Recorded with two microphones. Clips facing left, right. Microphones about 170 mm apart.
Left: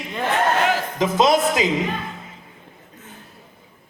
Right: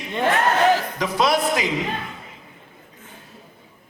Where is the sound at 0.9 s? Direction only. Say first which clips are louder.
Left 3 dB; 20° left (ahead or behind).